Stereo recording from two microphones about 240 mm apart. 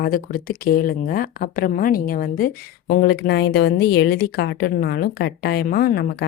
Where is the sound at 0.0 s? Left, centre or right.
Left.